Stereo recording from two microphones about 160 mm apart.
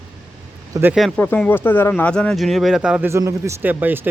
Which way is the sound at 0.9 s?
5° right (ahead or behind).